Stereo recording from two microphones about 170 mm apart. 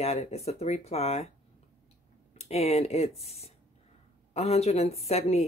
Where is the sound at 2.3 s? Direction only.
40° left (ahead or behind).